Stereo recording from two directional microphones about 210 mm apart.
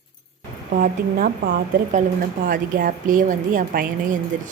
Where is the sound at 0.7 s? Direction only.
40° right (ahead or behind).